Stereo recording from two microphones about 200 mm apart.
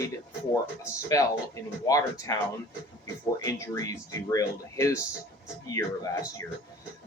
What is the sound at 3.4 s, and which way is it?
Speech, 15° left (ahead or behind).